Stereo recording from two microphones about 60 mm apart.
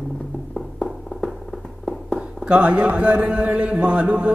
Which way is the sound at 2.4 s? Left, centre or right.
Right.